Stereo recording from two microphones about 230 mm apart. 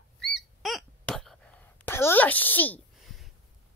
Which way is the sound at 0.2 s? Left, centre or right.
Centre.